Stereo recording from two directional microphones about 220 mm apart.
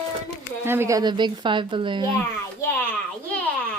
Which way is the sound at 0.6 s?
10° right (ahead or behind).